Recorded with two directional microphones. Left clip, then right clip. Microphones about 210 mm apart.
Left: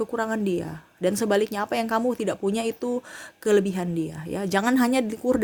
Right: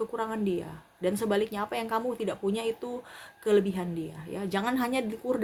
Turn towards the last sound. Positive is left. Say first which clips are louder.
# left 6 dB
turn(degrees=50)  # may be behind; listen again after turning